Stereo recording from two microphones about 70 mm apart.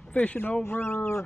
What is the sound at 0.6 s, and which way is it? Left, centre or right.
Speech, left.